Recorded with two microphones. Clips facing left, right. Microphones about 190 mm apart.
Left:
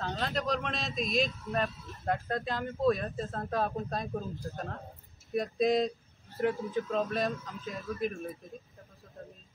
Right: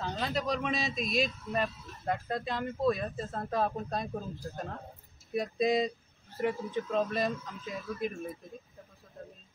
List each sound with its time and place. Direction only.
0.0 s speech: centre (ahead or behind)